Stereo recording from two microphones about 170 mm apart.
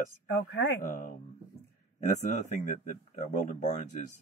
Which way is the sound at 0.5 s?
80° left.